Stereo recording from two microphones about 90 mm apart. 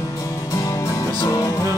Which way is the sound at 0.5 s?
40° left (ahead or behind).